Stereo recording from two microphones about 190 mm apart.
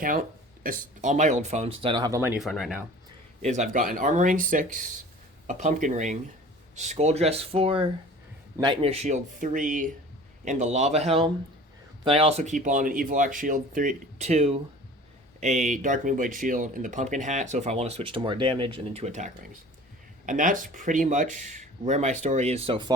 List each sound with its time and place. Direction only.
0.0 s speech: 45° right (ahead or behind); by 2.4 s 15° right (ahead or behind)
2.4 s speech: centre (ahead or behind)
3.4 s speech: 40° right (ahead or behind)